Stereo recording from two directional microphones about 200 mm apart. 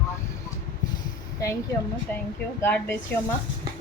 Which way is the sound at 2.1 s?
10° left (ahead or behind).